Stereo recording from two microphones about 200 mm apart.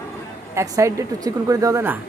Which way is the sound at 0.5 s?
15° right (ahead or behind).